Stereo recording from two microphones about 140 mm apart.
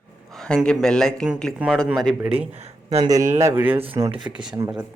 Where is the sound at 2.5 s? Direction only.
50° right (ahead or behind).